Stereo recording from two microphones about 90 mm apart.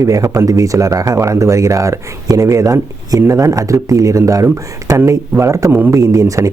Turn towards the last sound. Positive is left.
turn(degrees=-35)  # may be behind; listen again after turning